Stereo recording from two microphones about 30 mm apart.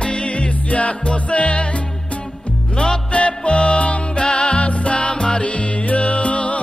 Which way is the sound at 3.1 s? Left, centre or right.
Left.